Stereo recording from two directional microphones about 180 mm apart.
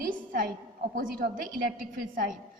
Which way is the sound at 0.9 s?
55° right (ahead or behind).